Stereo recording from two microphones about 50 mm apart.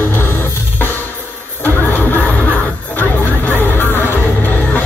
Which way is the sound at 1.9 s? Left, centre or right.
Left.